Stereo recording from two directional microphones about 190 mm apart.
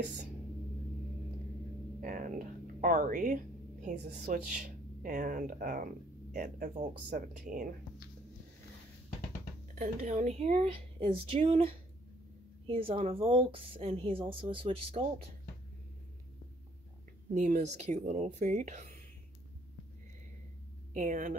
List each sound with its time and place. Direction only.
2.0 s speech: 45° right (ahead or behind)
9.8 s a woman's voice: 40° right (ahead or behind)
17.3 s speech: 40° right (ahead or behind)
20.9 s speech: 40° right (ahead or behind)